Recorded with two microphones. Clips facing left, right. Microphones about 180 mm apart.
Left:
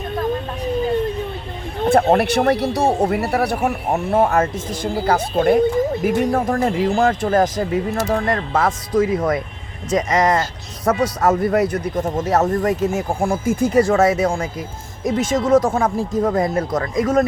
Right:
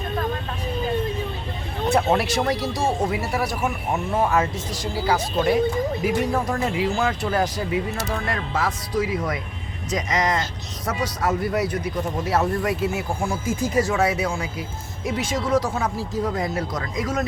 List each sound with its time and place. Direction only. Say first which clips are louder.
1.9 s speech: left 6 dB; 50° left (ahead or behind)